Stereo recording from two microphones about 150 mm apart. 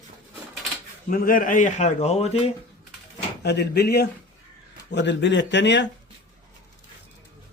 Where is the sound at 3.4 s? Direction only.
90° left.